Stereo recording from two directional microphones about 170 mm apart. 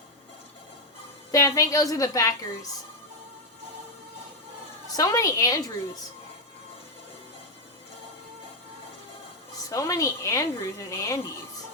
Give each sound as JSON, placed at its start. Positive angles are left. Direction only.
{"t": 1.3, "sound": "a woman's voice", "side_deg": 20}
{"t": 4.9, "sound": "a woman's voice", "side_deg": 20}
{"t": 9.6, "sound": "speech", "side_deg": 20}